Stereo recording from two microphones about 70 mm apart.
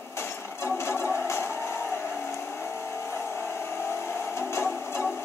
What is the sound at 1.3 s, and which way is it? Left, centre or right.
Vehicle, left.